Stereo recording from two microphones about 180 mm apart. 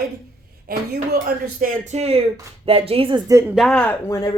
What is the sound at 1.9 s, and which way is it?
Speech, 35° right (ahead or behind).